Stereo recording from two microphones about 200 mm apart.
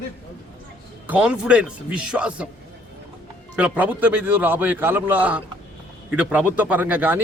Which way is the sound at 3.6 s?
10° right (ahead or behind).